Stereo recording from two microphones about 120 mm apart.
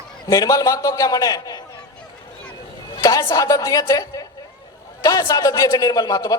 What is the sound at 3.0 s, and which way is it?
A man's voice, 30° left (ahead or behind).